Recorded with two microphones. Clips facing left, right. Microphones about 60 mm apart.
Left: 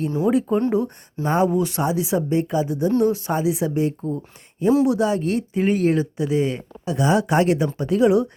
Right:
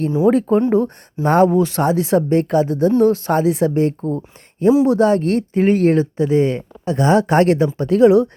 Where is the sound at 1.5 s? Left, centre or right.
Right.